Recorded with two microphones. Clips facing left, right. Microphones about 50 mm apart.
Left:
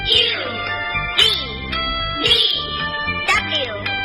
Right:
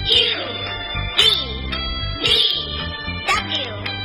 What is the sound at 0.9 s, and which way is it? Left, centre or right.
Music, left.